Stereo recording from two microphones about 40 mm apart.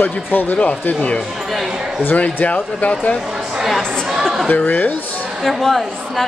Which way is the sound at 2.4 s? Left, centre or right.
Left.